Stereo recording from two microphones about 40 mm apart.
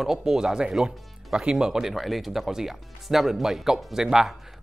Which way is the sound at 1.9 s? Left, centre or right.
Centre.